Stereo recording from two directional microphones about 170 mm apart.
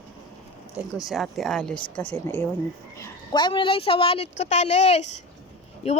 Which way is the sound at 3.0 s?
25° left (ahead or behind).